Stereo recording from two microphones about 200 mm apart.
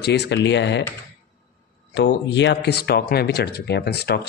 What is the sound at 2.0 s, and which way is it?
A man's voice, 65° left (ahead or behind).